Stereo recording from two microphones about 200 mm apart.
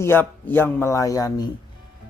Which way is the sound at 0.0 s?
10° left (ahead or behind).